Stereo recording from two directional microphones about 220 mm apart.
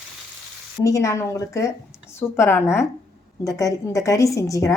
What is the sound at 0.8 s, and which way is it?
A woman's voice, 15° left (ahead or behind).